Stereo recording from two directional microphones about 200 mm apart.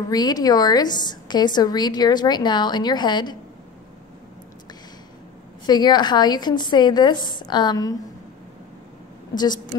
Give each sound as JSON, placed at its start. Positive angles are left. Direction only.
{"t": 0.1, "sound": "a woman's voice", "side_deg": 20}
{"t": 5.7, "sound": "a woman's voice", "side_deg": 20}
{"t": 9.3, "sound": "a woman's voice", "side_deg": 20}